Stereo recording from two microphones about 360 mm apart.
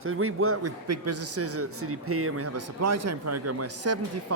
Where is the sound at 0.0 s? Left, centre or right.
Right.